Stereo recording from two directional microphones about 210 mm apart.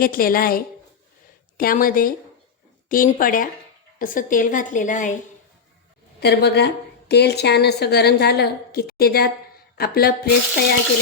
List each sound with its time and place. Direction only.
0.0 s a woman's voice: 45° left (ahead or behind)
6.1 s speech: 50° left (ahead or behind)